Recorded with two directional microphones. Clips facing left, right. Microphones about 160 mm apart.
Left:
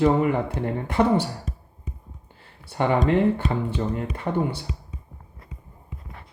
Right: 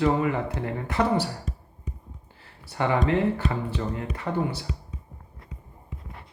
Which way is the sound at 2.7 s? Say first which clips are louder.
Left 3 dB; 25° left (ahead or behind).